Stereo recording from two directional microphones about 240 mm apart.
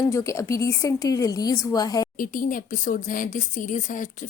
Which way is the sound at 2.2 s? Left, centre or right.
Left.